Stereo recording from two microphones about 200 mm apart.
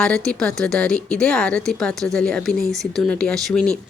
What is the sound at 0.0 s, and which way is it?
A woman's voice, 5° left (ahead or behind).